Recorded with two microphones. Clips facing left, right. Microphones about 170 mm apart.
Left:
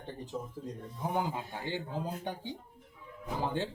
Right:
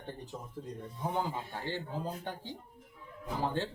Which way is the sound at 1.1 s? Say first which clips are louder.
Left 2 dB; 15° left (ahead or behind).